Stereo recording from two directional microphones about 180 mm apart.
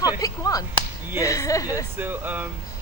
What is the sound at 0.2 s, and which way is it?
A woman's voice, 20° left (ahead or behind).